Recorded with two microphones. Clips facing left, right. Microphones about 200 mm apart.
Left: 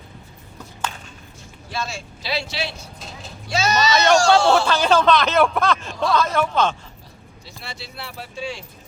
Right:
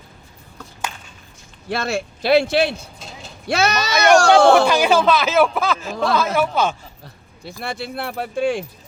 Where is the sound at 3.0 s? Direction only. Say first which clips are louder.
Even; centre (ahead or behind).